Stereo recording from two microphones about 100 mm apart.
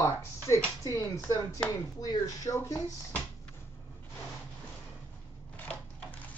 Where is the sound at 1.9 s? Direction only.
35° left (ahead or behind).